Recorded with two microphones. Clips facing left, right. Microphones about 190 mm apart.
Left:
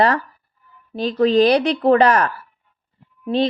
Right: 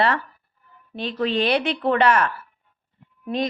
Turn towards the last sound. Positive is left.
turn(degrees=30)  # may be behind; listen again after turning